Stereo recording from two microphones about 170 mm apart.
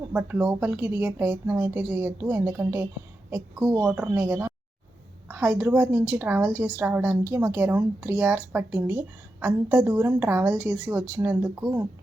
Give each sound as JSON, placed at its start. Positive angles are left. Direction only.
{"t": 0.1, "sound": "a woman's voice", "side_deg": -10}